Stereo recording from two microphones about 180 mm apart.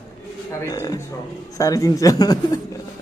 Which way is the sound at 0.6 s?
20° left (ahead or behind).